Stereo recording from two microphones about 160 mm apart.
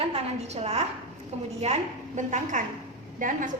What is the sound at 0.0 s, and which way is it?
A woman's voice, 40° right (ahead or behind).